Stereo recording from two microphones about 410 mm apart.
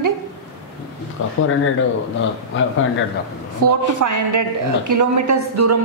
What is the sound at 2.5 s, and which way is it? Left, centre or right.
Speech, left.